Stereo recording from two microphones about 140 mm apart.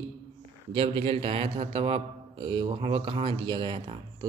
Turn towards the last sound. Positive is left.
turn(degrees=-35)  # may be behind; listen again after turning